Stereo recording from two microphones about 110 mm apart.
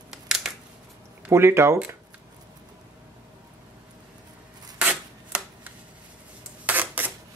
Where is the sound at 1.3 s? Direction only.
25° right (ahead or behind).